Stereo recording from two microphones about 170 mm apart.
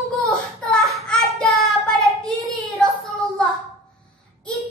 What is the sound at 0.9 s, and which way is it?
Child singing, centre (ahead or behind).